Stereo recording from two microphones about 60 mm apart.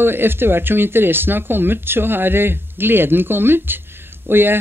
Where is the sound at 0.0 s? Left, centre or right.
Right.